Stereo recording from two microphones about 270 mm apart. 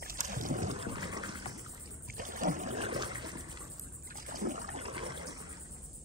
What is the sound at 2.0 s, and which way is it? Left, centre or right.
Trickle, right.